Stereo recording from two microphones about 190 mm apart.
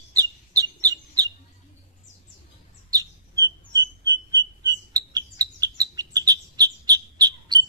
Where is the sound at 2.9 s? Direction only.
20° right (ahead or behind).